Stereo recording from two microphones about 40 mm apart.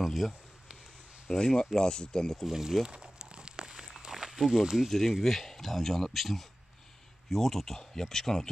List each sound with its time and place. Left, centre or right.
0.0 s speech: centre
1.4 s speech: centre
2.4 s speech: centre
2.8 s walk: right; by 4.6 s centre
4.6 s speech: centre
4.9 s speech: centre